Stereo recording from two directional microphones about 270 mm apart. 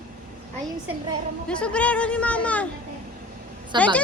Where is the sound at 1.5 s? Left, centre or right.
Centre.